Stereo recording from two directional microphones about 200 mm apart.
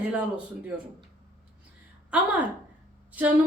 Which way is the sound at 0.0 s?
5° right (ahead or behind).